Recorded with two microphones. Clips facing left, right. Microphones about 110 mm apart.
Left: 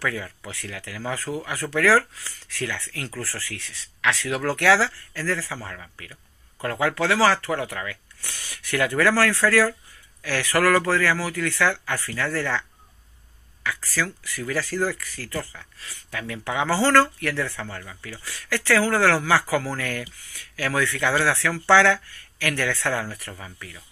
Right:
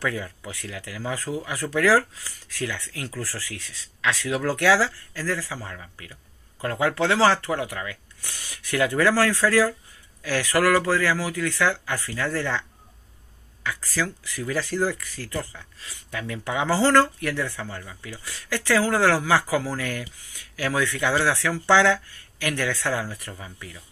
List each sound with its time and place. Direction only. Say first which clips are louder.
0.0 s speech: right 1 dB; 20° right (ahead or behind)